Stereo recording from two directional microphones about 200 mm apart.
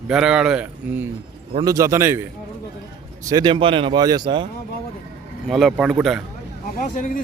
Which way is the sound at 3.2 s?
20° right (ahead or behind).